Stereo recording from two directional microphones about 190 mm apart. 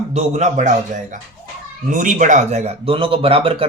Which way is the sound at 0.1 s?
35° right (ahead or behind).